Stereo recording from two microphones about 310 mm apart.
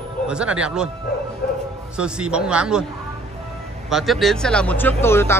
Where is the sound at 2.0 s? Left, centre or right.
Centre.